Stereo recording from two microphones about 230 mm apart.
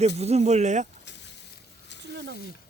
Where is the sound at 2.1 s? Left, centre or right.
Right.